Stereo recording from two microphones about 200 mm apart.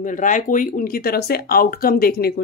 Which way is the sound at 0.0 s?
40° left (ahead or behind).